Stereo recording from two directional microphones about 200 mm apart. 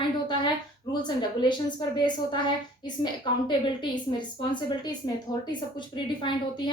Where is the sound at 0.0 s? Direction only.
25° left (ahead or behind).